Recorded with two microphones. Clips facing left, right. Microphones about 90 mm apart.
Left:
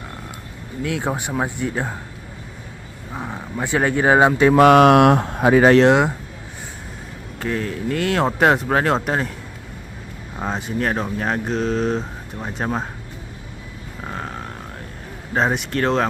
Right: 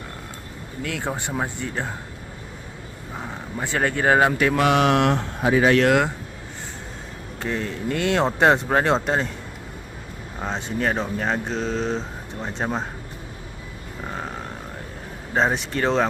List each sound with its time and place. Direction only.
0.8 s speech: 15° left (ahead or behind)
3.2 s speech: 15° left (ahead or behind)
4.5 s mantra: 50° left (ahead or behind)
5.7 s speech: 25° left (ahead or behind)
7.3 s speech: centre (ahead or behind)
10.4 s speech: 5° left (ahead or behind)
14.0 s a sound: centre (ahead or behind)
15.3 s speech: centre (ahead or behind)